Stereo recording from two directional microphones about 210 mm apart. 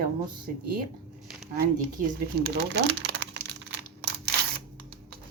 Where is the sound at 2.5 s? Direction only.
55° right (ahead or behind).